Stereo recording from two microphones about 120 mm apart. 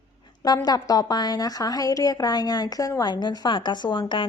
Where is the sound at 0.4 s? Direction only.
35° left (ahead or behind).